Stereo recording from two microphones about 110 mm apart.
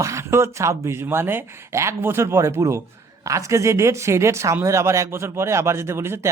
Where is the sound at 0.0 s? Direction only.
25° right (ahead or behind).